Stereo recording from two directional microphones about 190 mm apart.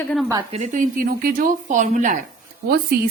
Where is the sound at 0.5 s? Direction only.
40° right (ahead or behind).